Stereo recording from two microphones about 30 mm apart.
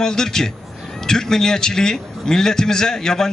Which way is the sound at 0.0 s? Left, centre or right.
Centre.